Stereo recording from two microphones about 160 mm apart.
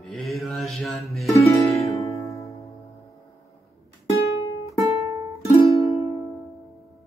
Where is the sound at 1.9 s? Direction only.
20° left (ahead or behind).